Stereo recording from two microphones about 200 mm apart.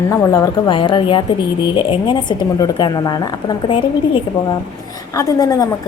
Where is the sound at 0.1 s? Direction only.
15° left (ahead or behind).